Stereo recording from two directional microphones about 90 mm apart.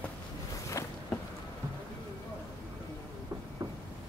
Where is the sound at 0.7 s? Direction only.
35° left (ahead or behind).